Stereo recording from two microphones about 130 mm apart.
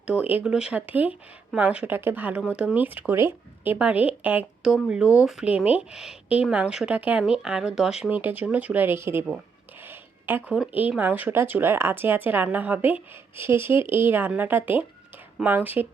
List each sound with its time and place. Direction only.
0.1 s speech: 10° right (ahead or behind)
9.8 s a sound: 15° right (ahead or behind)
10.5 s speech: 10° right (ahead or behind)